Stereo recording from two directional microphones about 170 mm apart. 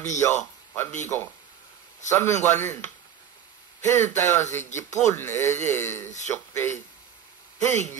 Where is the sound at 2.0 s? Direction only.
15° left (ahead or behind).